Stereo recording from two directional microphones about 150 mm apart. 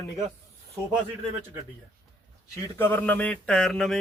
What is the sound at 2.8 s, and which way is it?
Speech, 10° left (ahead or behind).